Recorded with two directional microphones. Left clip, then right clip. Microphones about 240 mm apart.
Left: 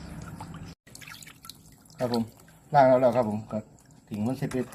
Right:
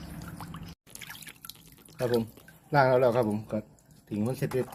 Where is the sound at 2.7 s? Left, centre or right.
Right.